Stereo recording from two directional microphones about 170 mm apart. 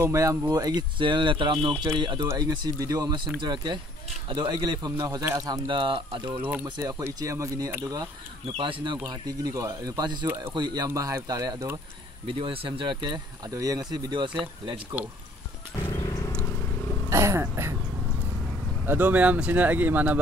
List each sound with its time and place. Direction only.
0.0 s a man's voice: 20° right (ahead or behind)
6.6 s a man's voice: 20° right (ahead or behind)
8.5 s a man's voice: 30° right (ahead or behind)
12.3 s a man's voice: 30° right (ahead or behind)
15.9 s wild animals: 20° left (ahead or behind)
17.1 s speech: 15° right (ahead or behind)
18.9 s speech: 10° right (ahead or behind)